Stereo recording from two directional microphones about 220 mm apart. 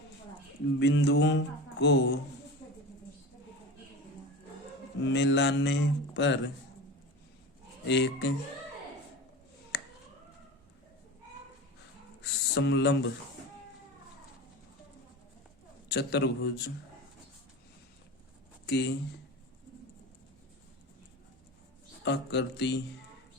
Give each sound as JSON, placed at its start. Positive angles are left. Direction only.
{"t": 0.8, "sound": "speech", "side_deg": 50}
{"t": 5.0, "sound": "speech", "side_deg": 55}
{"t": 7.9, "sound": "speech", "side_deg": 50}
{"t": 9.7, "sound": "finger snapping", "side_deg": 50}
{"t": 12.2, "sound": "a sound", "side_deg": 55}
{"t": 15.9, "sound": "speech", "side_deg": 50}
{"t": 18.6, "sound": "speech", "side_deg": 50}
{"t": 22.0, "sound": "speech", "side_deg": 50}